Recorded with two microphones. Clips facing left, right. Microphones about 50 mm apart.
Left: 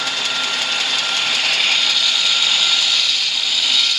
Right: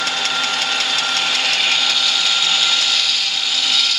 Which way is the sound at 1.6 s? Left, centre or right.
Centre.